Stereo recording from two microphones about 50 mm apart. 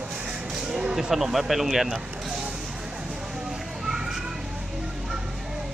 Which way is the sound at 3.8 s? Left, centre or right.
Centre.